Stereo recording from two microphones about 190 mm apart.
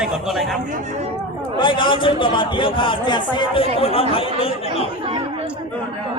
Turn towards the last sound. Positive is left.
turn(degrees=30)  # may be behind; listen again after turning